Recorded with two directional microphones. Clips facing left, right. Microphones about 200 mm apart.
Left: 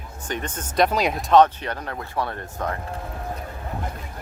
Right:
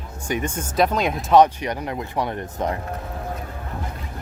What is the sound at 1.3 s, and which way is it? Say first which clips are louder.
Speech: right 1 dB; 15° right (ahead or behind).